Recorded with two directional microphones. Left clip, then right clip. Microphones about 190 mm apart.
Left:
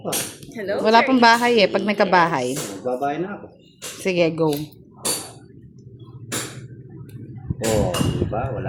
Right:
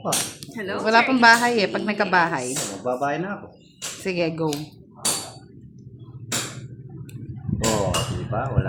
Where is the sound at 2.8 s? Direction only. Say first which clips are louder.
Left 1 dB; 35° right (ahead or behind).